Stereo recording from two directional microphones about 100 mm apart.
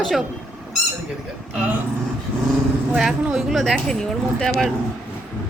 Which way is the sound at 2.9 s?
5° right (ahead or behind).